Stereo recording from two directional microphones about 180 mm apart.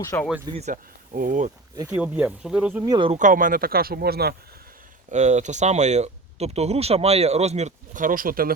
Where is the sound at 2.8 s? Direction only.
20° right (ahead or behind).